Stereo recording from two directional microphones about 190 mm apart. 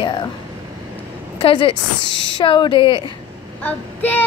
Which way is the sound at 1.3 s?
25° left (ahead or behind).